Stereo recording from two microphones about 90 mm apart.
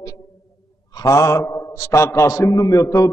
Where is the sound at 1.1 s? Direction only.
40° left (ahead or behind).